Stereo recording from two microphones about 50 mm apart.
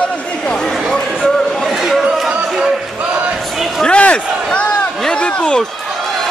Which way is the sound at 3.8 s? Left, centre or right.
Left.